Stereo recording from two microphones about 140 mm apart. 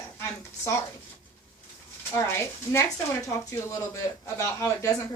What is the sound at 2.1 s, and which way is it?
Speech, 20° left (ahead or behind).